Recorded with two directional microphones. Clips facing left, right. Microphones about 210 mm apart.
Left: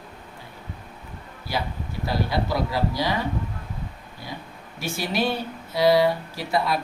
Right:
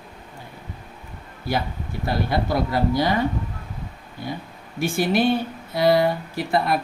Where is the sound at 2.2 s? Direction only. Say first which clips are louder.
Right 3 dB; 55° right (ahead or behind).